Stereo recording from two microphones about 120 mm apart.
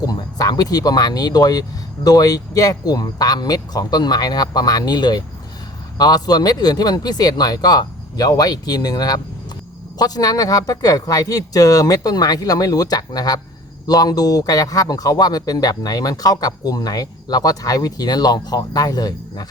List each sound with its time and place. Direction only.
0.0 s a man's voice: 30° left (ahead or behind)